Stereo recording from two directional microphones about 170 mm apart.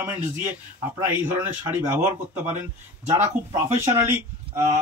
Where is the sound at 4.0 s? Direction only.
15° right (ahead or behind).